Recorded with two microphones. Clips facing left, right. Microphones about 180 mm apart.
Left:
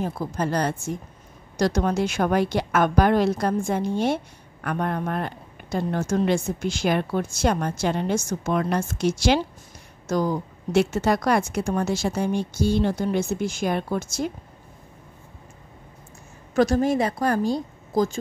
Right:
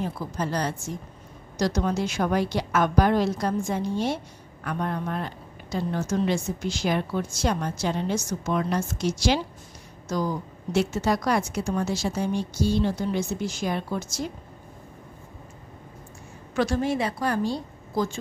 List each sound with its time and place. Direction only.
0.0 s a woman's voice: 50° left (ahead or behind)
10.7 s a woman's voice: 60° left (ahead or behind)
16.5 s a woman's voice: 45° left (ahead or behind)